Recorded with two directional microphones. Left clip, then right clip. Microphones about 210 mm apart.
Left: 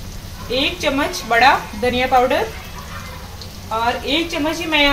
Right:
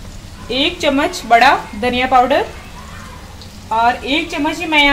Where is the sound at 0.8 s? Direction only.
45° right (ahead or behind).